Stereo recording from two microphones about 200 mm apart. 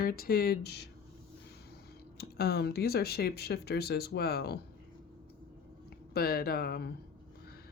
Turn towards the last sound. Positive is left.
turn(degrees=50)  # may be behind; listen again after turning